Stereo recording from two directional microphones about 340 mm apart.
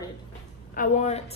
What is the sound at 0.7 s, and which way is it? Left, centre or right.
Speech, centre.